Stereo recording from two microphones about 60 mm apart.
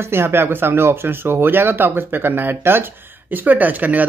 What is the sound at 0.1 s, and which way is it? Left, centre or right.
Speech, right.